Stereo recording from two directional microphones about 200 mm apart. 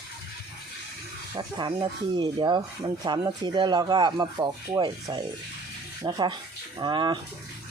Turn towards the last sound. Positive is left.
turn(degrees=-20)  # may be behind; listen again after turning